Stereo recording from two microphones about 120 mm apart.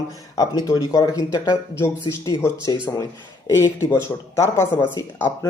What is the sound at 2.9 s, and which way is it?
Speech, 10° left (ahead or behind).